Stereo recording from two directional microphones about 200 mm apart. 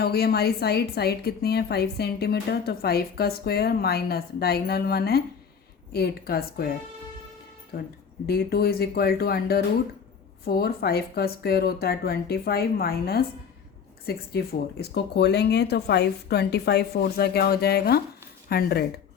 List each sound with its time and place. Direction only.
0.0 s a woman's voice: 50° left (ahead or behind)
7.7 s a woman's voice: 50° left (ahead or behind)